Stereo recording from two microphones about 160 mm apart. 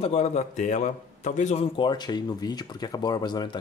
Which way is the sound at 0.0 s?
45° left (ahead or behind).